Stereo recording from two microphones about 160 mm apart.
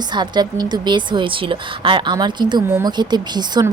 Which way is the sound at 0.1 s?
25° right (ahead or behind).